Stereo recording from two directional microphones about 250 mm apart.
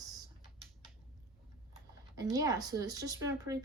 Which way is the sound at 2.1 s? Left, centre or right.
Centre.